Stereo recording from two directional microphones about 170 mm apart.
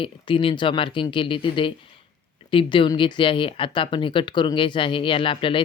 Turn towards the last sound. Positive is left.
turn(degrees=30)  # may be behind; listen again after turning